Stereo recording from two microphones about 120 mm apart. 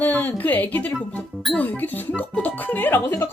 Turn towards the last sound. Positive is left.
turn(degrees=20)  # may be behind; listen again after turning